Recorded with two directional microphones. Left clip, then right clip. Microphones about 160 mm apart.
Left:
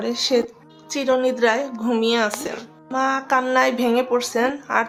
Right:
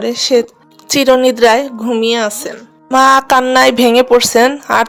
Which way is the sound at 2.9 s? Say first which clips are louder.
Right 12 dB; 90° right.